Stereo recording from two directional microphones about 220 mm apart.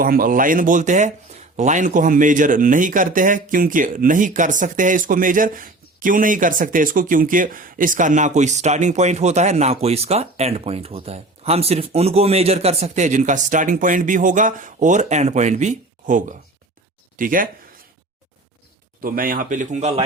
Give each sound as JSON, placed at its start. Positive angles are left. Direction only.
{"t": 0.0, "sound": "a man's voice", "side_deg": -40}
{"t": 19.0, "sound": "a man's voice", "side_deg": -40}